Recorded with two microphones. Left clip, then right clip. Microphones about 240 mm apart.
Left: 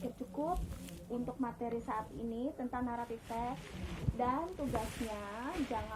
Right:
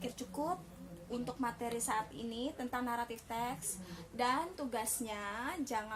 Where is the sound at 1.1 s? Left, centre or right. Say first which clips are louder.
Right 1 dB; right.